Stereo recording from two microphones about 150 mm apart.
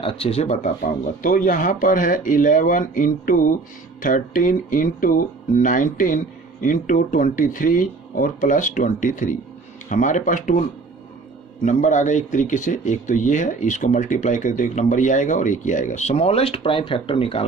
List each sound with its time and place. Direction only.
0.0 s speech: 40° left (ahead or behind); by 10.6 s 60° left (ahead or behind)
11.6 s speech: 55° left (ahead or behind); by 17.4 s 35° left (ahead or behind)